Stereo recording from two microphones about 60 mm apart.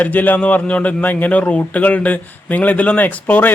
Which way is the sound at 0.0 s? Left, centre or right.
Left.